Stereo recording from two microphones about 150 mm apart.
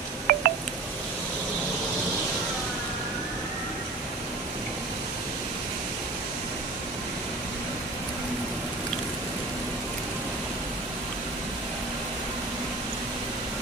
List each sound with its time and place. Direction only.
0.3 s telephone dialing: 75° right (ahead or behind)